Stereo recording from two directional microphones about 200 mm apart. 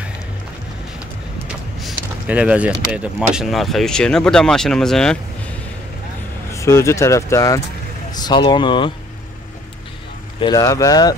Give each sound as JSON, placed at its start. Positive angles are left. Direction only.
{"t": 1.8, "sound": "a sound", "side_deg": -5}
{"t": 2.9, "sound": "speech", "side_deg": -5}
{"t": 6.5, "sound": "speech", "side_deg": 15}
{"t": 10.4, "sound": "speech", "side_deg": 20}